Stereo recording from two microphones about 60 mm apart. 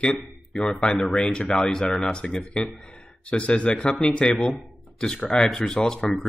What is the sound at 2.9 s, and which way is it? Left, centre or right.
Speech, left.